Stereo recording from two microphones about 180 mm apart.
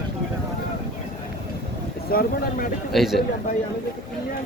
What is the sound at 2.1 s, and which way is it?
Speech, 55° left (ahead or behind).